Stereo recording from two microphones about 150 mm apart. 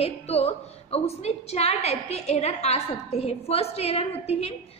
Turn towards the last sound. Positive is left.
turn(degrees=45)  # may be behind; listen again after turning